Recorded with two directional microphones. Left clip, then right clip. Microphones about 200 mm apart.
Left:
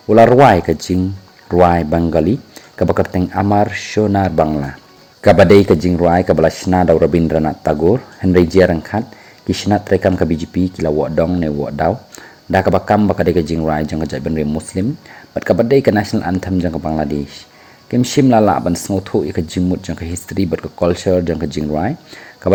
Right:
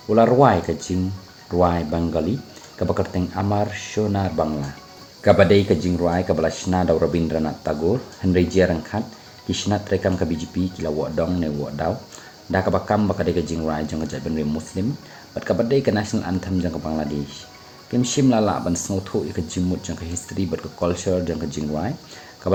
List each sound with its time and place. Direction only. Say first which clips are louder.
0.1 s speech: left 8 dB; 40° left (ahead or behind)